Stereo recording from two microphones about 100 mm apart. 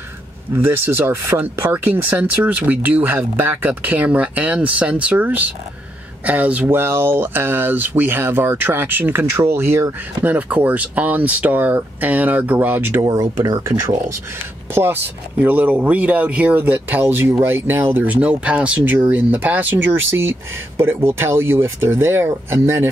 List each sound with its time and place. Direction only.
0.8 s speech: 20° right (ahead or behind)
10.2 s speech: 15° right (ahead or behind)
13.1 s speech: 35° right (ahead or behind)